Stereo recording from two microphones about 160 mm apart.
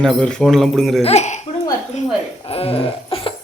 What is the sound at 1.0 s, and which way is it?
Speech, 45° left (ahead or behind).